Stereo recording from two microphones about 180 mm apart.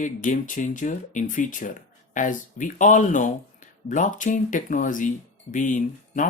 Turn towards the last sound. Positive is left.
turn(degrees=45)  # may be behind; listen again after turning